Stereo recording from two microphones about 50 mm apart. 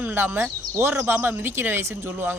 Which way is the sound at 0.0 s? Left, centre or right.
Right.